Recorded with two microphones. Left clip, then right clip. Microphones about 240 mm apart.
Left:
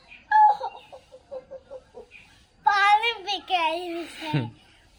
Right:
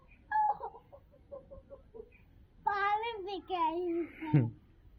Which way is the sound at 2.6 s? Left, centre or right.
Left.